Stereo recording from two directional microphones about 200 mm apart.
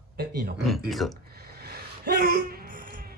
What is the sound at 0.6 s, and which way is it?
Speech, centre (ahead or behind).